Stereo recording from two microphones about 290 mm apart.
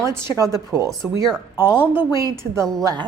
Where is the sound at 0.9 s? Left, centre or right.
Centre.